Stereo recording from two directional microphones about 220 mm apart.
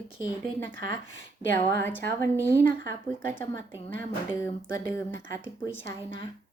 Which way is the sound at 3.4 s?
10° left (ahead or behind).